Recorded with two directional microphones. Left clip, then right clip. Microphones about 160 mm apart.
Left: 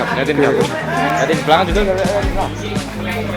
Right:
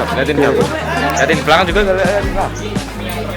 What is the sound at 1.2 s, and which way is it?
Speech, 30° right (ahead or behind).